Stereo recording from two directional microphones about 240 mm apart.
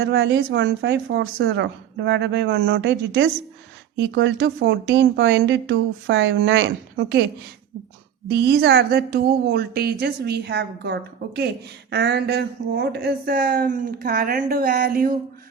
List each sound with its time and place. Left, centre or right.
0.0 s speech: right
8.3 s a woman's voice: right